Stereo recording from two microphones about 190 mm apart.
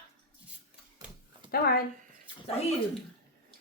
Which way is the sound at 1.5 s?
55° left (ahead or behind).